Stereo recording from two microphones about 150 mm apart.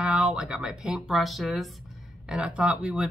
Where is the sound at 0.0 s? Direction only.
5° right (ahead or behind).